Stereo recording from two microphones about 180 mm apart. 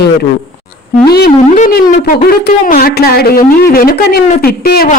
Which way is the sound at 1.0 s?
65° left (ahead or behind).